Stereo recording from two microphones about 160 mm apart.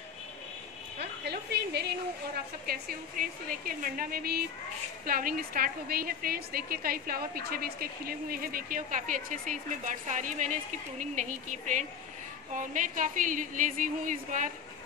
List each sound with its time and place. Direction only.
0.9 s a woman's voice: 90° right
2.6 s a woman's voice: 65° right (ahead or behind)